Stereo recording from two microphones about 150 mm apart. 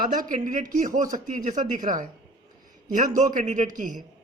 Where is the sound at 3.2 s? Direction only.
55° right (ahead or behind).